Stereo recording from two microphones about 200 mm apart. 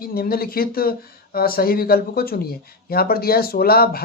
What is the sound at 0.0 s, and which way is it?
Speech, 50° left (ahead or behind).